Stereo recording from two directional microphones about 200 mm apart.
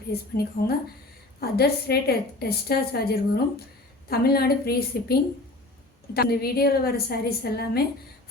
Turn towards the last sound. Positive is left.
turn(degrees=50)  # may be behind; listen again after turning